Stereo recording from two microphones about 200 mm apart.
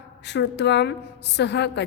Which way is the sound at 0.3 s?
60° left (ahead or behind).